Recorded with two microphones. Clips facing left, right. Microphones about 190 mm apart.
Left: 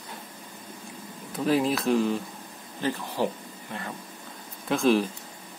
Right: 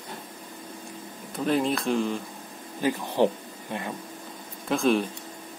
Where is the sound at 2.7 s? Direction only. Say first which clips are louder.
Right 4 dB; 15° right (ahead or behind).